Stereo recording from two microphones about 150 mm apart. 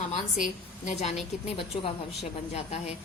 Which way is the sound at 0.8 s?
50° left (ahead or behind).